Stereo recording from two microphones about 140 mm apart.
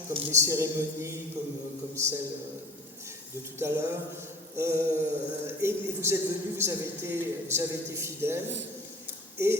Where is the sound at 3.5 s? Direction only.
20° right (ahead or behind).